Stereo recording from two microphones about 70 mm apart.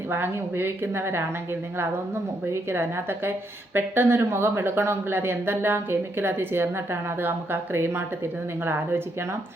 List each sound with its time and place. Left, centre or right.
0.1 s speech: right
2.5 s speech: right